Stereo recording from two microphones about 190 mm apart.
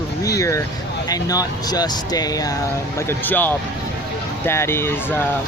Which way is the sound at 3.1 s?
10° left (ahead or behind).